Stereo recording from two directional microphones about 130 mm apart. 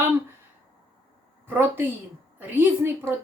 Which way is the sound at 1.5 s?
15° right (ahead or behind).